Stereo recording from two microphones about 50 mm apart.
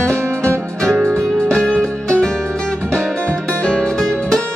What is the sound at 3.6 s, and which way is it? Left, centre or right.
Music, centre.